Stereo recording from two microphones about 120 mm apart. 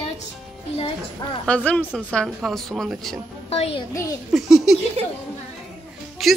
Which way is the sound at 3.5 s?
60° left (ahead or behind).